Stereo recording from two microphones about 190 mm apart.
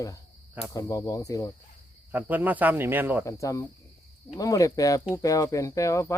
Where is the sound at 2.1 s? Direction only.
10° right (ahead or behind).